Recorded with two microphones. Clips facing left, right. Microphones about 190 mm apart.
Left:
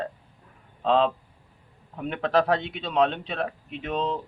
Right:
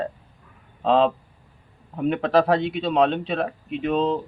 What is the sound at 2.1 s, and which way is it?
Speech, 5° right (ahead or behind).